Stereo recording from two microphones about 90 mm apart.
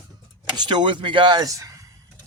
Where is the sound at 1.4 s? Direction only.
40° right (ahead or behind).